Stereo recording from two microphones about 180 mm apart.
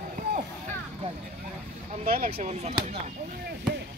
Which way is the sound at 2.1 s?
35° right (ahead or behind).